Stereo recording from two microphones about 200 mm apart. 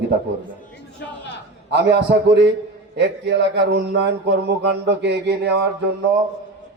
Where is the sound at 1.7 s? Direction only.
55° right (ahead or behind).